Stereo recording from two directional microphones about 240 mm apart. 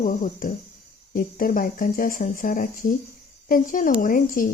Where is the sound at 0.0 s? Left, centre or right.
Left.